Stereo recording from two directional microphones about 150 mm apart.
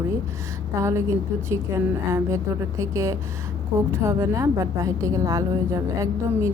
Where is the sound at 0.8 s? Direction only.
20° right (ahead or behind).